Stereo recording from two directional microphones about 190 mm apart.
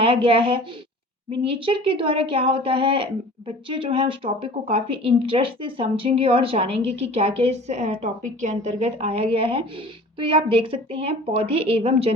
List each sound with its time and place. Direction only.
0.0 s a woman's voice: 30° right (ahead or behind)